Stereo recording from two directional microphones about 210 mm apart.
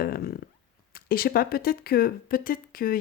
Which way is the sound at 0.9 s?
45° left (ahead or behind).